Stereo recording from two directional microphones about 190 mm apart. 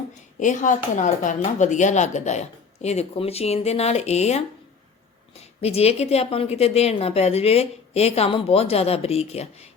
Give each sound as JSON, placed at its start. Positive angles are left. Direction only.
{"t": 0.3, "sound": "a woman's voice", "side_deg": 40}
{"t": 5.5, "sound": "a woman's voice", "side_deg": 35}